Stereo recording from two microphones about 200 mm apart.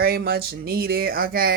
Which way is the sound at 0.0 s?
50° right (ahead or behind).